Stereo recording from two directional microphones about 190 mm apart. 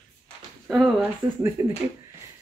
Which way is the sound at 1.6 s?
15° right (ahead or behind).